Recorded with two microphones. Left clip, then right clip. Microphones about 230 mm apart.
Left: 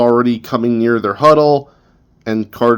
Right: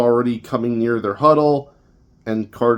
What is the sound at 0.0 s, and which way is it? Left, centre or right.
Speech, left.